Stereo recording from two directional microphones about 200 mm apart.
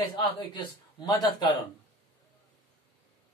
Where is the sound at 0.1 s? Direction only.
20° left (ahead or behind).